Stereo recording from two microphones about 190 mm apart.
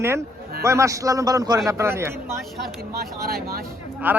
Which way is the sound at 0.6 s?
15° right (ahead or behind).